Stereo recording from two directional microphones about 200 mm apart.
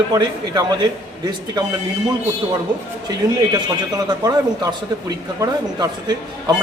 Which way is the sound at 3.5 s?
20° right (ahead or behind).